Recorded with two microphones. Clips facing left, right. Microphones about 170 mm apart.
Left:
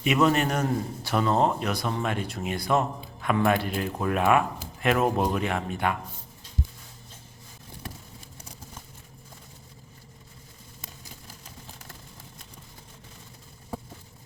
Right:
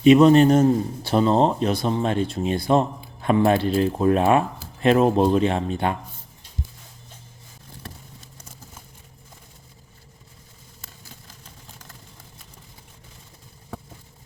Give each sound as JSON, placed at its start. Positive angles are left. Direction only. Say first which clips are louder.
{"t": 0.0, "sound": "a man's voice", "louder": "right 10 dB", "side_deg": -25}